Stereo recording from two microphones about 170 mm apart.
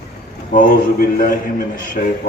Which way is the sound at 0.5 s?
55° left (ahead or behind).